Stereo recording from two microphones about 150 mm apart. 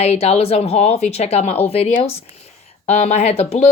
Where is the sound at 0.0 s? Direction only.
45° left (ahead or behind).